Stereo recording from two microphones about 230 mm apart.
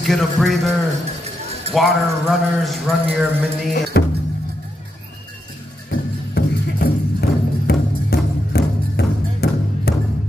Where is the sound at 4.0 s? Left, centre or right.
Left.